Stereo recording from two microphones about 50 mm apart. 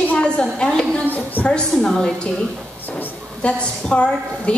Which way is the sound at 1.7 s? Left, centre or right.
Centre.